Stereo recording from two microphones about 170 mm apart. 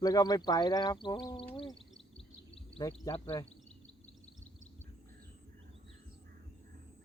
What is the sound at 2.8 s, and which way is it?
Speech, 20° left (ahead or behind).